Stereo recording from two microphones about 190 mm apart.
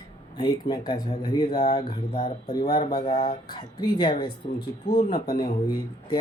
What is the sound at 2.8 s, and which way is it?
Speech, 25° left (ahead or behind).